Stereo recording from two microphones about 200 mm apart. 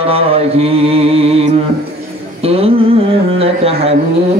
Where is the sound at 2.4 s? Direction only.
30° right (ahead or behind).